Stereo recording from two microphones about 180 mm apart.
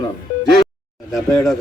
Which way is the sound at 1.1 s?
Centre (ahead or behind).